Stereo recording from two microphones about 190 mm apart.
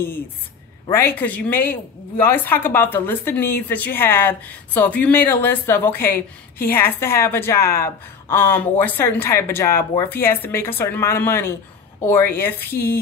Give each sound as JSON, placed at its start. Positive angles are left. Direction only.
{"t": 0.8, "sound": "a woman's voice", "side_deg": 15}
{"t": 12.6, "sound": "a woman's voice", "side_deg": 50}